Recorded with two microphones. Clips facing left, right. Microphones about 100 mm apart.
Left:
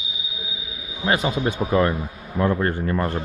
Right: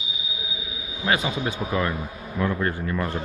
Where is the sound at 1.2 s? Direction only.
45° left (ahead or behind).